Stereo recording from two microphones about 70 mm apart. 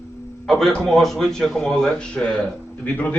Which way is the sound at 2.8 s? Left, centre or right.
Left.